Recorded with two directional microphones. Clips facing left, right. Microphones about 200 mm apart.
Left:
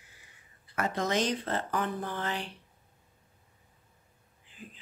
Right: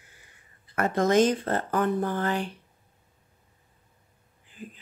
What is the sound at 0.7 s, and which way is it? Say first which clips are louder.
Speech: right 7 dB; 50° right (ahead or behind).